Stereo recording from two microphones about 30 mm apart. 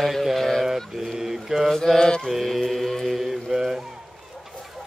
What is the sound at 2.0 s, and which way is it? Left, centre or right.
Mantra, left.